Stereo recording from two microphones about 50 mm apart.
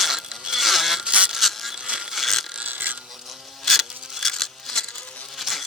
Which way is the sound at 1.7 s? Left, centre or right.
Centre.